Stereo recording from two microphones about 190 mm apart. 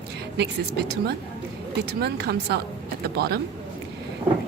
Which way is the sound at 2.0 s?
60° right (ahead or behind).